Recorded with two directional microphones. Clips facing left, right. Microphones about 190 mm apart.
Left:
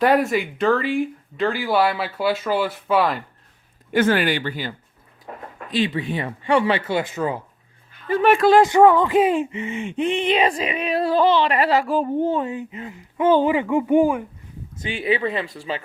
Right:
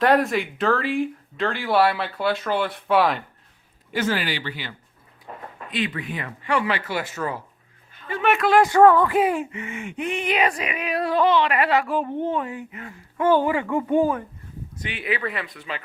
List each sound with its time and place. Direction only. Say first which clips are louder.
0.0 s speech: left 1 dB; centre (ahead or behind)
3.9 s speech: left 6 dB; 55° left (ahead or behind)
5.7 s speech: left 5 dB; 30° left (ahead or behind)
8.0 s speech: left 6 dB; 35° left (ahead or behind); by 14.3 s 15° left (ahead or behind)
14.8 s speech: left 6 dB; 30° left (ahead or behind)